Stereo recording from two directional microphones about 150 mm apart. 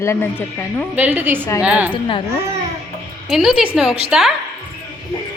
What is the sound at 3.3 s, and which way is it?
Speech, 5° right (ahead or behind).